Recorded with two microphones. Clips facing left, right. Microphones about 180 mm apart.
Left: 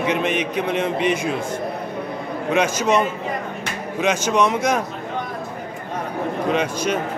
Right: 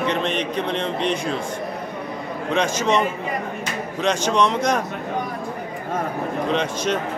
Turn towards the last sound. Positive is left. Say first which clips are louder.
# left 1 dB
turn(degrees=5)  # may be behind; listen again after turning